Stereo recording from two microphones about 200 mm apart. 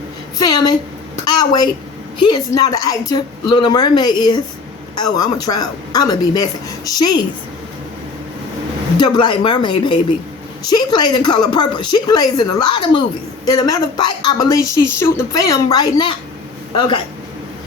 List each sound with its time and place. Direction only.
0.3 s a woman's voice: 20° left (ahead or behind)
1.2 s a sound: 20° left (ahead or behind)
2.1 s a woman's voice: 20° left (ahead or behind)
9.0 s a woman's voice: 20° left (ahead or behind)